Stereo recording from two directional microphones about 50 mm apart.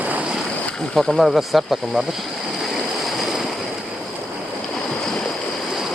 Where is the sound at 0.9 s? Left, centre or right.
Centre.